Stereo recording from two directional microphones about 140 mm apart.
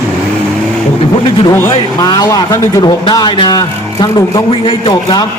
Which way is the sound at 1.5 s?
20° left (ahead or behind).